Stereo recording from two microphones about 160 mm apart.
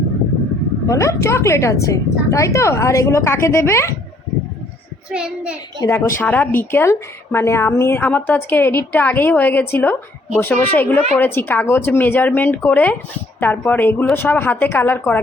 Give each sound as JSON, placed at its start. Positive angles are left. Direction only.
{"t": 0.9, "sound": "a woman's voice", "side_deg": 20}
{"t": 5.1, "sound": "a child's voice", "side_deg": -5}
{"t": 5.8, "sound": "a woman's voice", "side_deg": 15}